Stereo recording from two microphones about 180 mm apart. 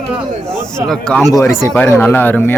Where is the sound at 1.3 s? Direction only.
15° left (ahead or behind).